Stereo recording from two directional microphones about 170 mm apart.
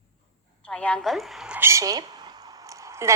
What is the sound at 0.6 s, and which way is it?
A woman's voice, 5° left (ahead or behind).